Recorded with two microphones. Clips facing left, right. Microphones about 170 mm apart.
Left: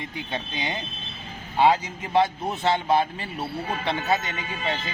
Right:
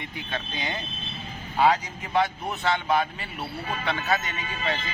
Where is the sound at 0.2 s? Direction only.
25° left (ahead or behind).